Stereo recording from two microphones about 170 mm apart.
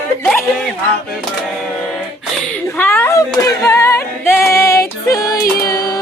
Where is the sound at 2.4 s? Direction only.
10° left (ahead or behind).